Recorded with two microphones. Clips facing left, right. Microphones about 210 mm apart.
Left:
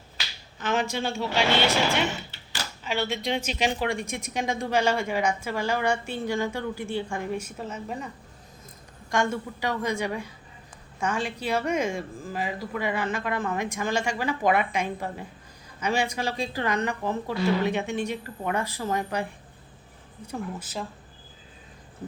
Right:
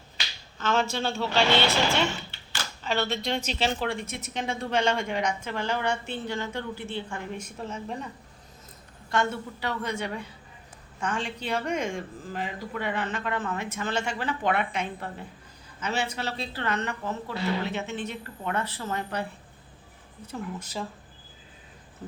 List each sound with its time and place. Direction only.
0.6 s a woman's voice: 15° left (ahead or behind)
2.3 s a sound: 35° left (ahead or behind)
2.8 s a woman's voice: 10° left (ahead or behind)
9.0 s a woman's voice: 15° left (ahead or behind)
20.6 s speech: 5° left (ahead or behind)